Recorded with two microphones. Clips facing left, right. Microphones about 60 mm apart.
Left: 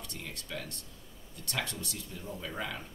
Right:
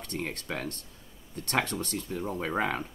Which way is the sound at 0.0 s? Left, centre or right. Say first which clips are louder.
Right 9 dB; right.